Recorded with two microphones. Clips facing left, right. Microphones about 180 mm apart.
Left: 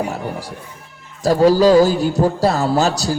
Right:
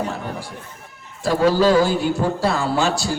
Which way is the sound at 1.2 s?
40° left (ahead or behind).